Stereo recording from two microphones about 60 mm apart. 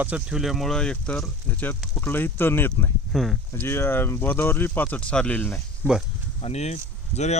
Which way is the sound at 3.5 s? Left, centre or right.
Left.